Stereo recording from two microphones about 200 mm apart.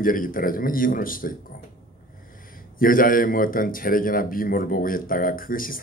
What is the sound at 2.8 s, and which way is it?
A man's voice, 45° left (ahead or behind).